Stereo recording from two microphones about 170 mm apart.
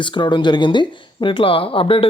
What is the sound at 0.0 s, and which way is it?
Speech, 30° left (ahead or behind).